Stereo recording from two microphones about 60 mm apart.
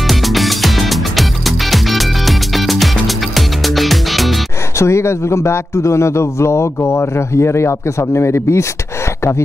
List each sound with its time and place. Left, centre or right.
0.1 s music: centre
4.7 s a man's voice: left